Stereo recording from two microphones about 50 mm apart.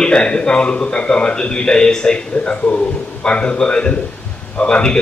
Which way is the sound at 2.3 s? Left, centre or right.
Left.